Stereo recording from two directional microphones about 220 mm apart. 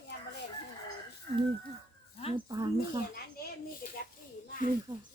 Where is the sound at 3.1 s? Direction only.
40° left (ahead or behind).